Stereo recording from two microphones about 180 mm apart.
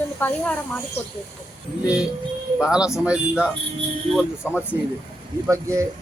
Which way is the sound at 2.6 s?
5° right (ahead or behind).